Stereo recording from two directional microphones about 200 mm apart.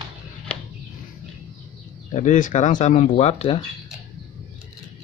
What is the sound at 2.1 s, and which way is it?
Speech, 40° left (ahead or behind).